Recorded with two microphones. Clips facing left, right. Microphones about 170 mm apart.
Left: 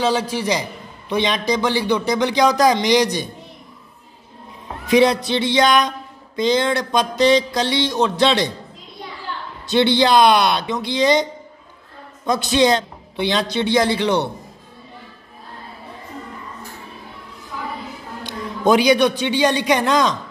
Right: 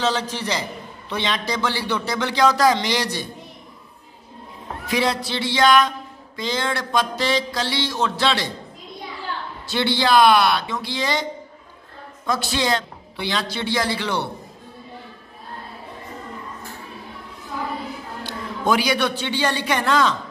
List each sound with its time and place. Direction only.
0.0 s a man's voice: 10° left (ahead or behind)
4.8 s music: 20° left (ahead or behind)
9.7 s music: 20° left (ahead or behind)
12.3 s music: 20° left (ahead or behind)
18.2 s a man's voice: 20° left (ahead or behind)